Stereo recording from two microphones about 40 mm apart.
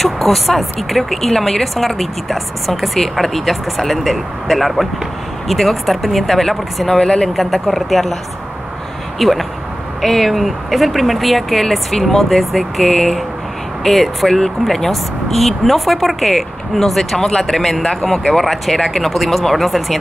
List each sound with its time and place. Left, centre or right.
0.0 s speech: centre
7.0 s speech: centre
7.3 s speech: centre
9.2 s speech: centre